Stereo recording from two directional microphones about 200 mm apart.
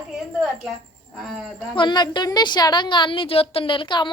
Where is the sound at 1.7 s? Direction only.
25° left (ahead or behind).